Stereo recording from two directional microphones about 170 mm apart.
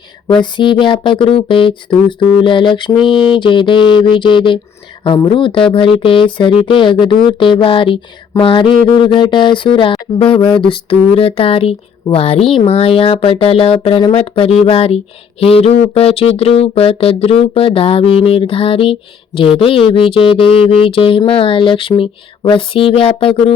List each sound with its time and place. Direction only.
0.3 s speech: 30° left (ahead or behind)
8.3 s a sound: 30° left (ahead or behind)
9.0 s speech: 30° left (ahead or behind)